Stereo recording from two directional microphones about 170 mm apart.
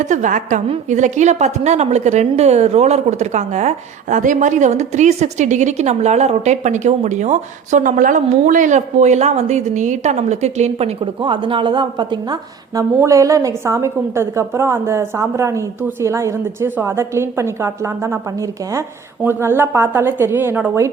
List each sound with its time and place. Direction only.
0.0 s a woman's voice: 45° right (ahead or behind); by 20.9 s 15° right (ahead or behind)